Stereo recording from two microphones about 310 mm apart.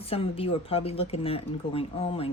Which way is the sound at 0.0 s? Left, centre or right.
Centre.